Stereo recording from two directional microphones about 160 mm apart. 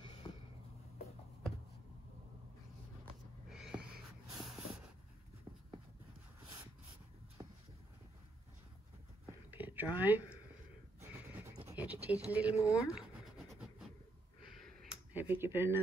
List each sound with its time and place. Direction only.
0.2 s a sound: 30° left (ahead or behind)
3.4 s snort: 5° right (ahead or behind)
9.5 s a sound: 10° right (ahead or behind)
11.7 s speech: 10° right (ahead or behind)
12.9 s scratch: 5° right (ahead or behind)
15.1 s speech: 15° right (ahead or behind)